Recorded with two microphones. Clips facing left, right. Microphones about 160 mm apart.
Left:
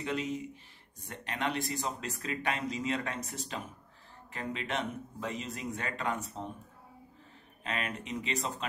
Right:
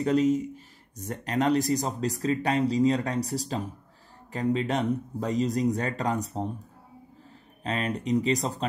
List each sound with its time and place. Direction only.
0.0 s speech: 40° right (ahead or behind)
7.6 s speech: 35° right (ahead or behind)